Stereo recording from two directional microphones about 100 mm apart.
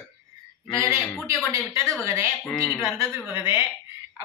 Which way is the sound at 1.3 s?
30° right (ahead or behind).